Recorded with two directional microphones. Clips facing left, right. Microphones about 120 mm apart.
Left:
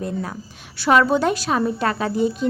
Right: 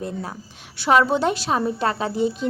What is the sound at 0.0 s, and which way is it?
A woman's voice, 30° right (ahead or behind).